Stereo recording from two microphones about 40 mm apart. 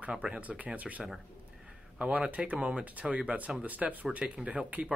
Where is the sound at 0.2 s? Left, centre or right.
Right.